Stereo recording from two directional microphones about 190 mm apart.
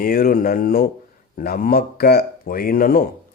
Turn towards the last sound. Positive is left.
turn(degrees=50)  # may be behind; listen again after turning